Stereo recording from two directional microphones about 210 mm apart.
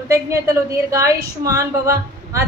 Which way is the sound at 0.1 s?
15° right (ahead or behind).